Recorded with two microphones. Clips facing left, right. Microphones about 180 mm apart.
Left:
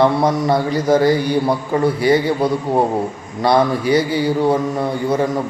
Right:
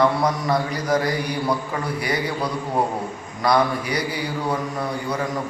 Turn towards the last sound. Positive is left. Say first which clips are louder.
# left 7 dB
turn(degrees=25)  # may be behind; listen again after turning